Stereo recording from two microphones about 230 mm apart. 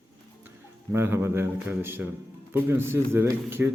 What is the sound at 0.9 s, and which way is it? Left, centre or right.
A man's voice, centre.